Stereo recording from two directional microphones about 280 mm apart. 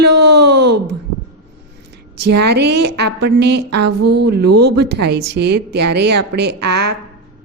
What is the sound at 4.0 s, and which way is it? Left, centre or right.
Speech, right.